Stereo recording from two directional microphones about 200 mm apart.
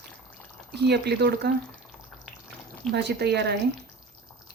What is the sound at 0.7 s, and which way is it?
Speech, 55° right (ahead or behind).